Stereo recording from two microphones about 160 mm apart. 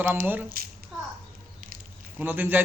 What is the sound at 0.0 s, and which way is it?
Speech, 10° right (ahead or behind).